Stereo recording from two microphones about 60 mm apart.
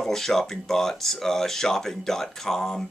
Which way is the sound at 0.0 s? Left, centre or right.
Centre.